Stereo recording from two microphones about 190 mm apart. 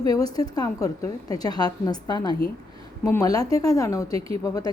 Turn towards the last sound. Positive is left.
turn(degrees=20)  # may be behind; listen again after turning